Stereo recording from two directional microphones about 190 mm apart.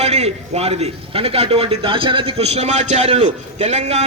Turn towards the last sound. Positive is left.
turn(degrees=-35)  # may be behind; listen again after turning